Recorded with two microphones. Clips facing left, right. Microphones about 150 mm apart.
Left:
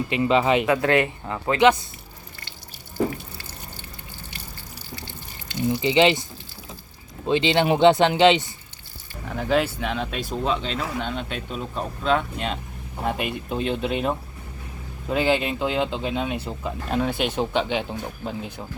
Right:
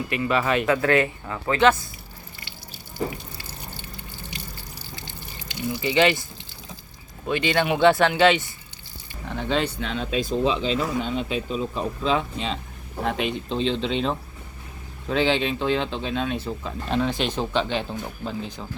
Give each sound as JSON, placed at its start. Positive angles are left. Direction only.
{"t": 0.1, "sound": "a man's voice", "side_deg": 20}
{"t": 5.6, "sound": "a man's voice", "side_deg": 20}
{"t": 7.3, "sound": "a man's voice", "side_deg": 25}
{"t": 9.2, "sound": "speech", "side_deg": 5}